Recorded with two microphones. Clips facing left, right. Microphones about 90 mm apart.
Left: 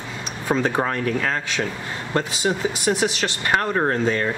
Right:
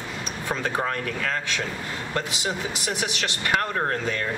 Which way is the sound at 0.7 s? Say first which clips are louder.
Left 5 dB; 40° left (ahead or behind).